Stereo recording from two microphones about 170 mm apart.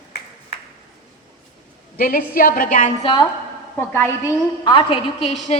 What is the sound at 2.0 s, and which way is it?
Speech, 55° left (ahead or behind).